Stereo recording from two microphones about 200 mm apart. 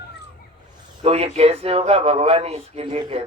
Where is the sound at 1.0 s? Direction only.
30° right (ahead or behind).